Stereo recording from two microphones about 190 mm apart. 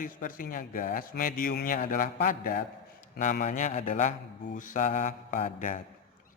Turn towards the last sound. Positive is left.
turn(degrees=40)  # may be behind; listen again after turning